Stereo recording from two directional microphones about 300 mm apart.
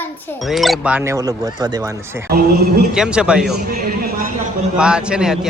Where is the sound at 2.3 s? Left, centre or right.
Right.